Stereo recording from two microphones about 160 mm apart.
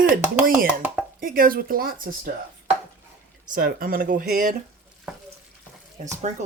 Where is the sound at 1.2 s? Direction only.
60° right (ahead or behind).